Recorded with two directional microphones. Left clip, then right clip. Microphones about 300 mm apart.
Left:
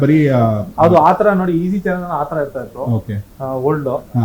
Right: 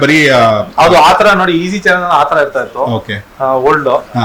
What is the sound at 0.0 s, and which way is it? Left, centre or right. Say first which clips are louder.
A man's voice: right 7 dB; centre.